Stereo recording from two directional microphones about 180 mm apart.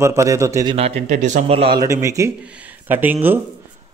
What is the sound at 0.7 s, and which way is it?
Speech, 35° right (ahead or behind).